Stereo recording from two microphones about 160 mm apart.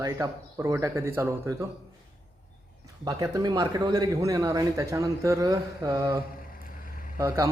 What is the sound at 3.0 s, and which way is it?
Speech, 20° right (ahead or behind).